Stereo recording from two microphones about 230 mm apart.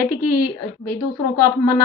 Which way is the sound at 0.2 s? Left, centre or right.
Left.